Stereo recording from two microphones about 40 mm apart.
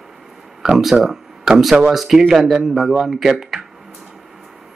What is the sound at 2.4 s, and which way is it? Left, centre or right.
Speech, centre.